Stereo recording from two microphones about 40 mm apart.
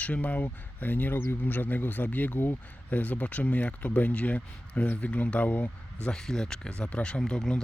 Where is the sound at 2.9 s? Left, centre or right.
Left.